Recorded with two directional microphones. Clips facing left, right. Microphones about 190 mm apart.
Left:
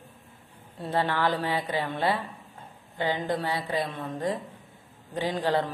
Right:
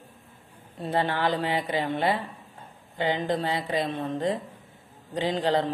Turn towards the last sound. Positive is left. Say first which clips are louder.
# right 2 dB
turn(degrees=-20)  # may be behind; listen again after turning